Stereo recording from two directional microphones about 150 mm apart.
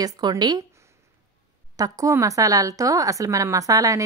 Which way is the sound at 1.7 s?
25° right (ahead or behind).